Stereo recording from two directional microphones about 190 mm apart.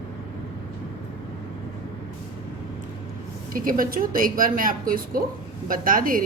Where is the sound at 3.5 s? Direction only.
45° right (ahead or behind).